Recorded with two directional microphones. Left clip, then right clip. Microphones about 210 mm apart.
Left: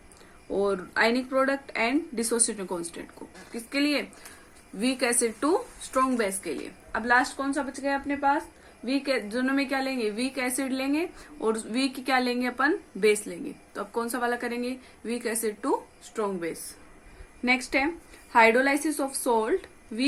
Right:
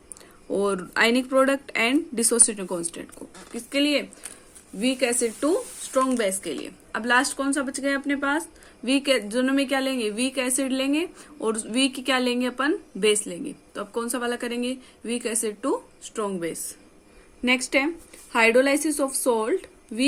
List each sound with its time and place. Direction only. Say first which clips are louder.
0.5 s a woman's voice: right 2 dB; 40° right (ahead or behind)